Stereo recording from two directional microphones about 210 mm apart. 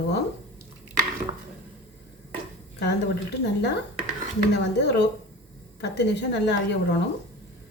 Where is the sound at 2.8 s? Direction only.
55° left (ahead or behind).